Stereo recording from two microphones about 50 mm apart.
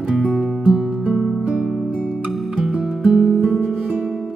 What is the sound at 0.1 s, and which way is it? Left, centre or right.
Music, centre.